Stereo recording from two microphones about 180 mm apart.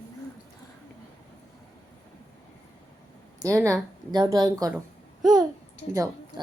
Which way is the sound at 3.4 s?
15° right (ahead or behind).